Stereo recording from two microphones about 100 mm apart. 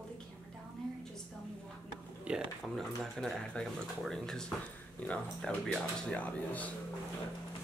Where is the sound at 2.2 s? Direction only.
5° right (ahead or behind); by 6.7 s 15° left (ahead or behind).